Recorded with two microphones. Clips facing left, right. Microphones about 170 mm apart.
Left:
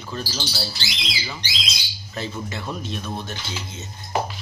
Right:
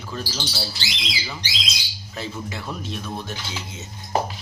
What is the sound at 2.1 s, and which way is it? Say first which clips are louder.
Speech: left 1 dB; 5° right (ahead or behind).